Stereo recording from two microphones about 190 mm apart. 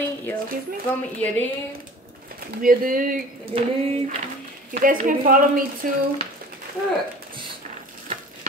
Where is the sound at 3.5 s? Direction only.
30° right (ahead or behind).